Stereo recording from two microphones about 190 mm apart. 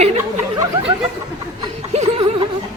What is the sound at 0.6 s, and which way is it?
Chatter, 30° right (ahead or behind).